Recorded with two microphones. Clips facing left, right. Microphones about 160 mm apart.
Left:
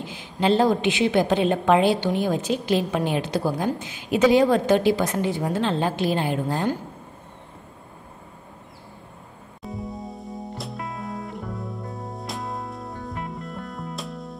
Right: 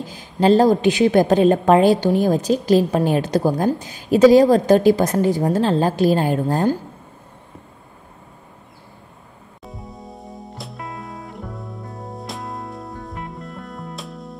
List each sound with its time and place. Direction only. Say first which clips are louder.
0.0 s a woman's voice: right 6 dB; 40° right (ahead or behind)
9.7 s music: left 4 dB; centre (ahead or behind)